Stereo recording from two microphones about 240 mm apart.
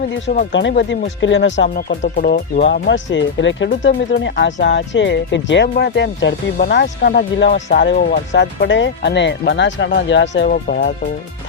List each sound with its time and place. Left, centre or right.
0.3 s speech: left
1.9 s speech: left